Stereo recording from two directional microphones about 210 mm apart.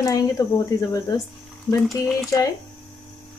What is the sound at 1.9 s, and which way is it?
Speech, 15° left (ahead or behind).